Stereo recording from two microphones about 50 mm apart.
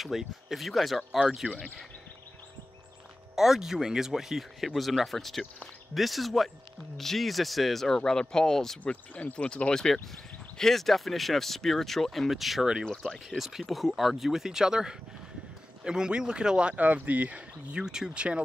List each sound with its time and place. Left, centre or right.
0.2 s speech: centre
1.5 s speech: centre
3.3 s speech: centre
8.8 s speech: left; by 17.4 s right
17.6 s speech: centre